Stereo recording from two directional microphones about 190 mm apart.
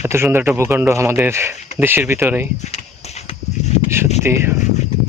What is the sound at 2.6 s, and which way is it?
Horse, 35° left (ahead or behind).